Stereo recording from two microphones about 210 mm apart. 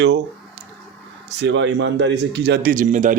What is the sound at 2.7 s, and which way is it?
Speech, 35° right (ahead or behind).